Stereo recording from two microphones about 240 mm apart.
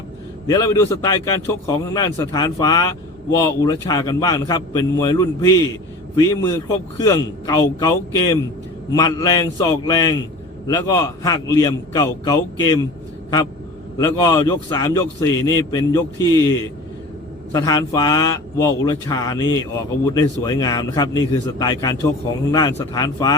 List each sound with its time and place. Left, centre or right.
0.4 s a man's voice: centre
7.0 s a man's voice: centre
14.0 s a man's voice: centre